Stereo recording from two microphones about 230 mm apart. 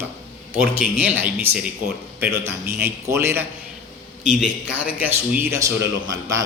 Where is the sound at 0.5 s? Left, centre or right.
Centre.